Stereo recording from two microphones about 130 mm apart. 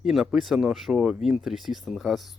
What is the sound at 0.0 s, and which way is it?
Speech, 5° right (ahead or behind).